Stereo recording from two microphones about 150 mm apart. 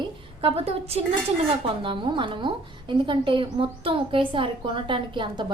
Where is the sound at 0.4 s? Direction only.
40° right (ahead or behind).